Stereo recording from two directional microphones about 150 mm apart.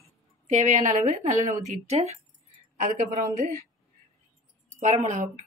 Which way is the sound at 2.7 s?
60° right (ahead or behind).